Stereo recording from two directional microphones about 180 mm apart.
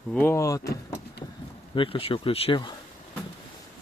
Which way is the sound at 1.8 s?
30° left (ahead or behind).